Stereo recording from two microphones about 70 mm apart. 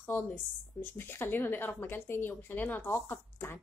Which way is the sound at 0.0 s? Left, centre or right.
Left.